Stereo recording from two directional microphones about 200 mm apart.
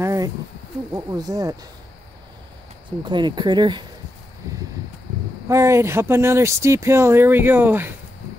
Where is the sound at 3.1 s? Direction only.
20° right (ahead or behind).